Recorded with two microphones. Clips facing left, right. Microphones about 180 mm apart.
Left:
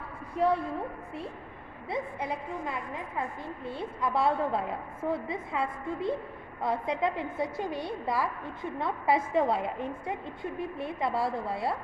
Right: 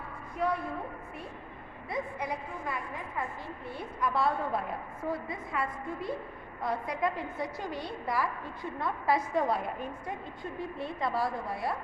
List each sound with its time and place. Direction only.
0.3 s a woman's voice: 30° left (ahead or behind)
1.9 s a woman's voice: 25° left (ahead or behind)